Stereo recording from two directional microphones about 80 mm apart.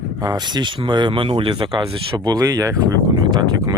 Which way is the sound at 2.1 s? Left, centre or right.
Right.